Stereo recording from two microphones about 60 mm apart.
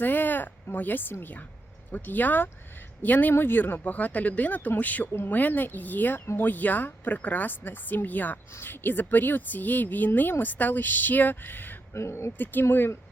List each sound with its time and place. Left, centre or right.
0.0 s a sound: left
1.2 s a woman's voice: left
11.9 s speech: left
12.4 s a woman's voice: left
12.6 s speech: left